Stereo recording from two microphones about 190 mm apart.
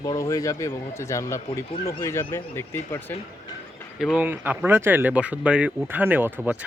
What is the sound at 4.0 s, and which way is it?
Speech, centre (ahead or behind).